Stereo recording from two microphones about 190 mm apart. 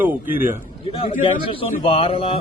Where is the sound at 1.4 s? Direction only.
30° left (ahead or behind).